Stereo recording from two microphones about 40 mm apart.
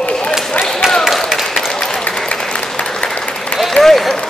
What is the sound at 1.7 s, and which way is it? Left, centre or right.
Applause, centre.